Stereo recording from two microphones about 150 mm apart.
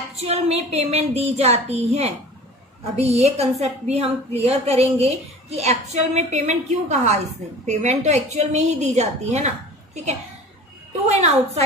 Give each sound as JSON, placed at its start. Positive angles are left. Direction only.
{"t": 0.2, "sound": "a woman's voice", "side_deg": -45}
{"t": 11.1, "sound": "a woman's voice", "side_deg": -45}